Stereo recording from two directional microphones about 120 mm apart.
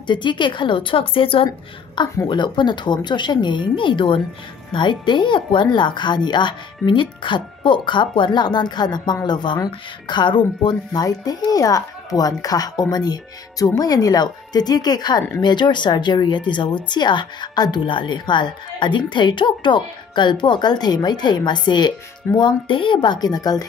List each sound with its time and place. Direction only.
0.0 s a woman's voice: 40° left (ahead or behind)